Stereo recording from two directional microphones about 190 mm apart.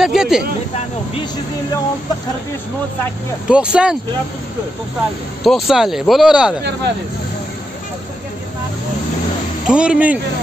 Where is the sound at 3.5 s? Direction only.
5° right (ahead or behind).